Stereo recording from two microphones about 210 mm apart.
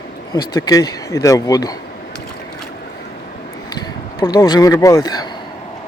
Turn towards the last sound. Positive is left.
turn(degrees=20)  # may be behind; listen again after turning